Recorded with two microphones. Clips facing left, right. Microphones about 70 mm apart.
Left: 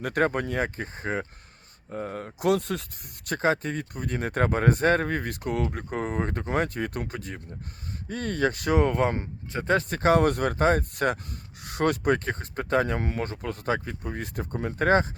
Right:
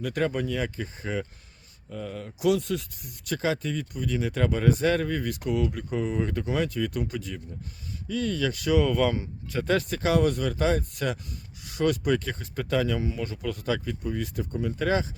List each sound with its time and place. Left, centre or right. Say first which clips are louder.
0.0 s speech: left 2 dB; left
9.9 s speech: left 5 dB; left
13.0 s speech: even; left